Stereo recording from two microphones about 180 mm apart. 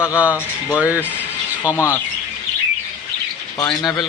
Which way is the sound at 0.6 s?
10° right (ahead or behind).